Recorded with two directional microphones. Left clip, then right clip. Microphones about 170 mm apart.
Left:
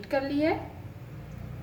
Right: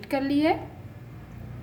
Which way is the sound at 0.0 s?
50° right (ahead or behind).